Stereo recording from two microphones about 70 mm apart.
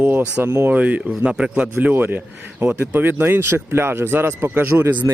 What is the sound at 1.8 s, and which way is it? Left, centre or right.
Speech, right.